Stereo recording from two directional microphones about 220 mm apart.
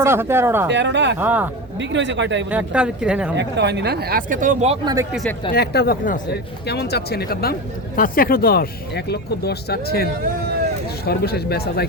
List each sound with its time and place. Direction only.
0.0 s speech: 10° right (ahead or behind)
0.7 s speech: 55° right (ahead or behind)
1.2 s speech: 5° right (ahead or behind)
1.8 s speech: 55° right (ahead or behind)
2.5 s speech: 5° right (ahead or behind)
3.3 s speech: 50° right (ahead or behind); by 4.9 s 30° right (ahead or behind)
5.5 s speech: 45° left (ahead or behind)